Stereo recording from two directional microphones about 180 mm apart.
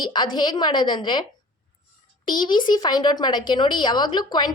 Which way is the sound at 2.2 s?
25° left (ahead or behind).